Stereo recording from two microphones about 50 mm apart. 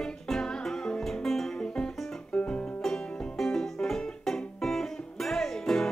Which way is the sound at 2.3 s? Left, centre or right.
Left.